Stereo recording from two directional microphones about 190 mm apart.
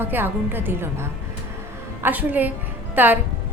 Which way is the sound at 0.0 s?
10° right (ahead or behind).